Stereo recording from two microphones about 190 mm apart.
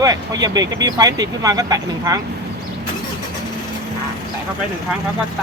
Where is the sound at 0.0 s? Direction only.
20° right (ahead or behind).